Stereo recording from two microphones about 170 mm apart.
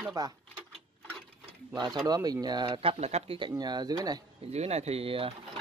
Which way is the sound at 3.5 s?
25° right (ahead or behind).